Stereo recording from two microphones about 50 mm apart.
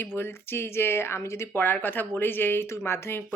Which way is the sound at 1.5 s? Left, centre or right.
Left.